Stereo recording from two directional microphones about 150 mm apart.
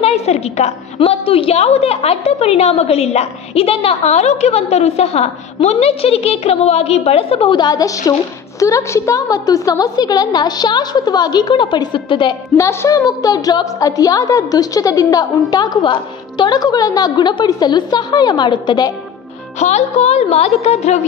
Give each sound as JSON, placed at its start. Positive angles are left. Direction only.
{"t": 0.0, "sound": "a woman's voice", "side_deg": 45}
{"t": 12.5, "sound": "a woman's voice", "side_deg": 20}
{"t": 19.6, "sound": "a woman's voice", "side_deg": 50}